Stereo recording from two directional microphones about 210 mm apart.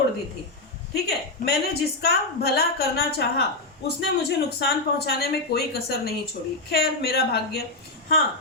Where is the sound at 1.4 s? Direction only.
50° left (ahead or behind).